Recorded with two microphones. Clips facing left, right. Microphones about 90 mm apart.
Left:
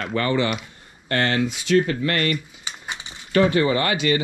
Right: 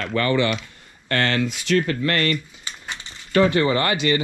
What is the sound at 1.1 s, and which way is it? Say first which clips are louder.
Speech: even; 20° left (ahead or behind).